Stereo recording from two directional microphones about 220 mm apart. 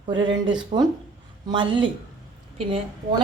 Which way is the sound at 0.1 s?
20° right (ahead or behind).